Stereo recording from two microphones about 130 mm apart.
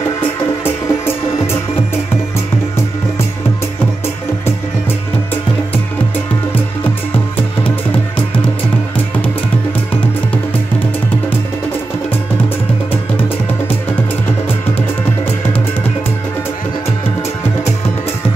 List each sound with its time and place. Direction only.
0.7 s music: 20° left (ahead or behind)
7.3 s music: 15° left (ahead or behind)